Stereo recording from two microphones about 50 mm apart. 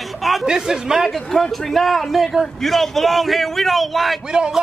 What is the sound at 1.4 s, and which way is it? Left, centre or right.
Speech, centre.